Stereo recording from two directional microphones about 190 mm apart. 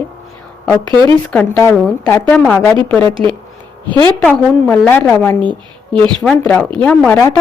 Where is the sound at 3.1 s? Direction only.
30° right (ahead or behind).